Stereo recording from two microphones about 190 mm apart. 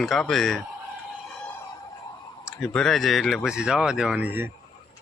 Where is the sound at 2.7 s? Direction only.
Centre (ahead or behind).